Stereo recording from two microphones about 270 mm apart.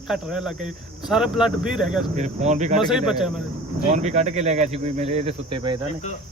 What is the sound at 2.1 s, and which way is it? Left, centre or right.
Speech, right.